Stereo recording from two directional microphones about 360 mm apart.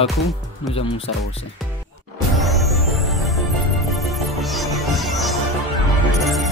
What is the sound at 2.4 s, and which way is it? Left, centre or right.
Music, centre.